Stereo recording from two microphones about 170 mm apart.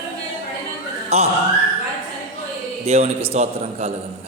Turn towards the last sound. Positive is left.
turn(degrees=-35)  # may be behind; listen again after turning